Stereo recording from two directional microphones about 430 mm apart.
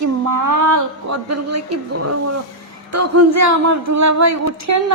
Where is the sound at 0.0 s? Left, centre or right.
Right.